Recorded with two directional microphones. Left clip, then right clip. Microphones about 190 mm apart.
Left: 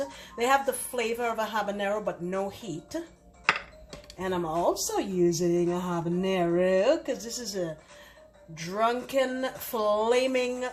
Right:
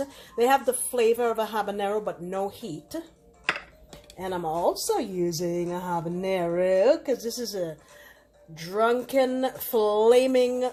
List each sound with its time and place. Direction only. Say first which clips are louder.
0.3 s speech: right 3 dB; 45° right (ahead or behind)
4.2 s speech: right 1 dB; 45° right (ahead or behind)